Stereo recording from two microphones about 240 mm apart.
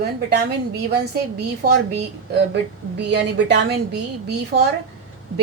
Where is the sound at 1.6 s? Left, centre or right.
Right.